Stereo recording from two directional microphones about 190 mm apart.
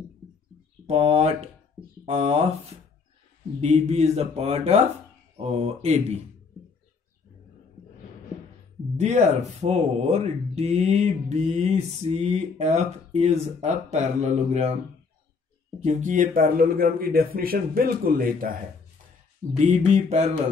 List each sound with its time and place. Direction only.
0.8 s speech: 30° right (ahead or behind)
3.6 s speech: 35° right (ahead or behind)
8.9 s speech: 35° right (ahead or behind)
15.8 s speech: 35° right (ahead or behind)
19.5 s speech: 35° right (ahead or behind)